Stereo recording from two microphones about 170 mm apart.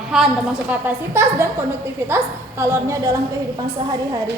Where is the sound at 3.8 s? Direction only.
25° right (ahead or behind).